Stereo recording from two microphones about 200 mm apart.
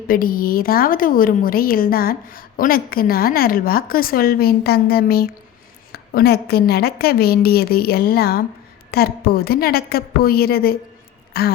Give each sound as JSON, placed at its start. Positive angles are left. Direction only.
{"t": 0.1, "sound": "a woman's voice", "side_deg": 45}